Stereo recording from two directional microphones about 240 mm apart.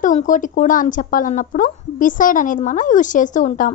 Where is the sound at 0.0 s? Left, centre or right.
Left.